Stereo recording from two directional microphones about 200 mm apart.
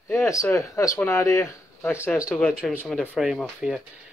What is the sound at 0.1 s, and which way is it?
Speech, 15° left (ahead or behind).